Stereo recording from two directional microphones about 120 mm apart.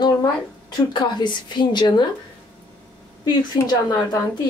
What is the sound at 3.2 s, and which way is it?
A woman's voice, 30° left (ahead or behind).